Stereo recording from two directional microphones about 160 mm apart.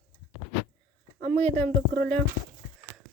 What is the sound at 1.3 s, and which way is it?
Speech, 10° left (ahead or behind).